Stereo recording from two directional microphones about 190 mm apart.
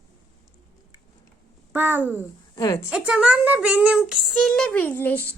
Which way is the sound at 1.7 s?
10° right (ahead or behind).